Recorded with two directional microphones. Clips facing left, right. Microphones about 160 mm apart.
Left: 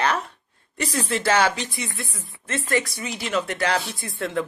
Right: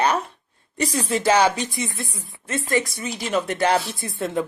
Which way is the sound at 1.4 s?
40° right (ahead or behind).